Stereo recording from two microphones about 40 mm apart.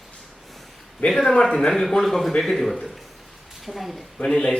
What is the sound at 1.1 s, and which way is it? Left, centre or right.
A woman's voice, centre.